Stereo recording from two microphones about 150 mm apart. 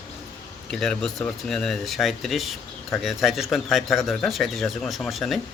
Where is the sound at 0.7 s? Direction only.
5° left (ahead or behind).